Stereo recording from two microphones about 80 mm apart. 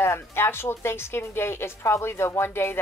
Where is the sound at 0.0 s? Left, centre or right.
Left.